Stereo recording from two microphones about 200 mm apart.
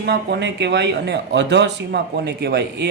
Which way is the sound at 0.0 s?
55° right (ahead or behind).